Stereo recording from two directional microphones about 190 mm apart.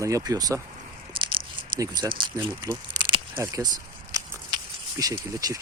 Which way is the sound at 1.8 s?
20° right (ahead or behind).